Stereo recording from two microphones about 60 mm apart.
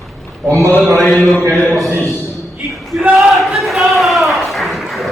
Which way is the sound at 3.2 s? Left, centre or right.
Centre.